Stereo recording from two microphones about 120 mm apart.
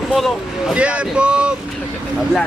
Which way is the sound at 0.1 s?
Centre (ahead or behind).